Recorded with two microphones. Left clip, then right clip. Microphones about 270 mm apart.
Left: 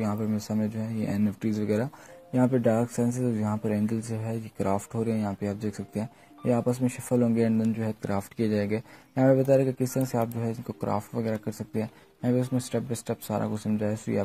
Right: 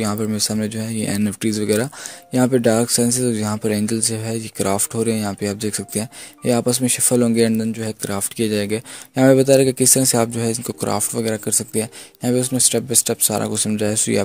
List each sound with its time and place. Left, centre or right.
0.0 s speech: right
9.2 s speech: right
12.9 s speech: right